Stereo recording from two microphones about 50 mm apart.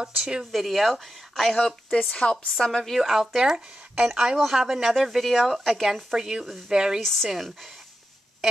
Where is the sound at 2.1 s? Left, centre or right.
Centre.